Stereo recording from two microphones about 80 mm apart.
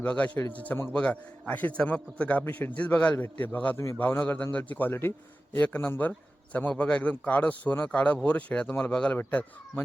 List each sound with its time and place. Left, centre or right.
0.0 s a man's voice: centre